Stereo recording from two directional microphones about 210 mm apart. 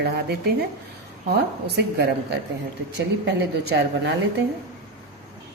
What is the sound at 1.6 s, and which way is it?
Speech, 50° right (ahead or behind).